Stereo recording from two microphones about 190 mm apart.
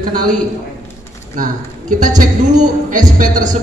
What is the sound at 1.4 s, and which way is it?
A man's voice, 40° right (ahead or behind).